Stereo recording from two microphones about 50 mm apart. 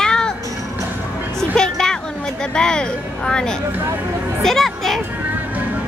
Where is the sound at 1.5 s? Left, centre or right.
Centre.